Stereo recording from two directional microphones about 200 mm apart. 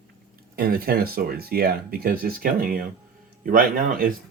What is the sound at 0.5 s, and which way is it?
Speech, 50° right (ahead or behind).